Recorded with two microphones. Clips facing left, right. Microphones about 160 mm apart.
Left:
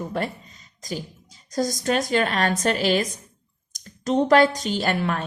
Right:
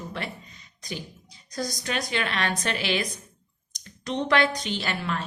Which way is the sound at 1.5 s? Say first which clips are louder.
Left 7 dB; 45° left (ahead or behind).